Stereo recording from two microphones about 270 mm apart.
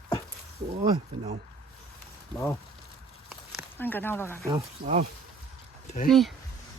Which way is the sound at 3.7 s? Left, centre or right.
Centre.